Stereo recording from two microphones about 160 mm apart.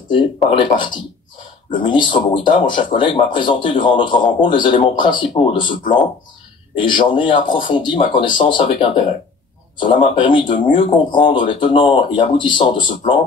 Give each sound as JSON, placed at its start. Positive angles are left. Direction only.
{"t": 0.7, "sound": "speech", "side_deg": 30}